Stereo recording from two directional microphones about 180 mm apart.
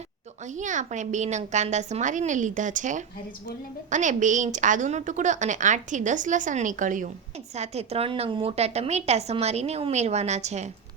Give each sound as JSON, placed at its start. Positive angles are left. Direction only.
{"t": 0.5, "sound": "a woman's voice", "side_deg": -45}